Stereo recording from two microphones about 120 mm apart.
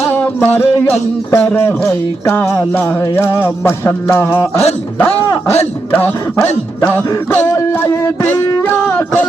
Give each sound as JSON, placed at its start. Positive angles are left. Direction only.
{"t": 0.1, "sound": "music", "side_deg": 20}
{"t": 5.9, "sound": "speech", "side_deg": 20}
{"t": 7.5, "sound": "music", "side_deg": 20}